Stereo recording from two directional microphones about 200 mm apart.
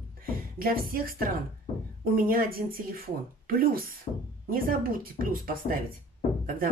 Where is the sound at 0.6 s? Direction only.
45° right (ahead or behind).